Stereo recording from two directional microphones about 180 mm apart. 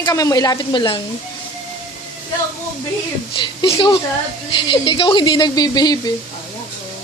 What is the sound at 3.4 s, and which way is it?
Speech, 25° left (ahead or behind).